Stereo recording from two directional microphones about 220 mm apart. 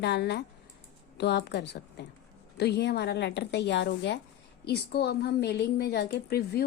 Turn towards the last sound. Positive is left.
turn(degrees=45)  # may be behind; listen again after turning